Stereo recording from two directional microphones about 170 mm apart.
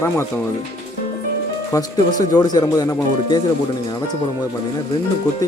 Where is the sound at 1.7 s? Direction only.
20° left (ahead or behind).